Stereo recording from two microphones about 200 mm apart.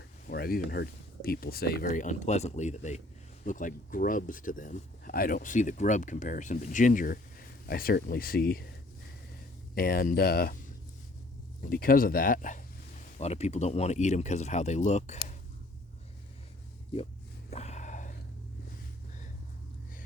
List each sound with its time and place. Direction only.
0.3 s speech: 50° left (ahead or behind)
9.7 s speech: 45° left (ahead or behind)
11.6 s speech: 45° left (ahead or behind)
17.5 s a sound: 35° left (ahead or behind)